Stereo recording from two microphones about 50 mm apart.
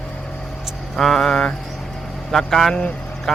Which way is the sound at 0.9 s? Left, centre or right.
Centre.